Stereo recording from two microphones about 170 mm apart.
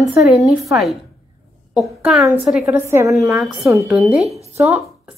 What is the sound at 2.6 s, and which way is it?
Speech, 15° right (ahead or behind).